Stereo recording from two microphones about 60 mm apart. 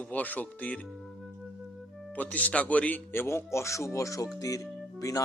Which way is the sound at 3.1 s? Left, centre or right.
Left.